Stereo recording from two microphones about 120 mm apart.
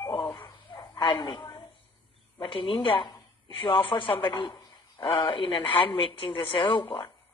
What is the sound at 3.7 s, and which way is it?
A man's voice, 45° left (ahead or behind).